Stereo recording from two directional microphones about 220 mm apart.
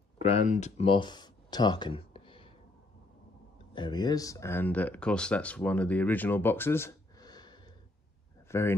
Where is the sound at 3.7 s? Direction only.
20° left (ahead or behind).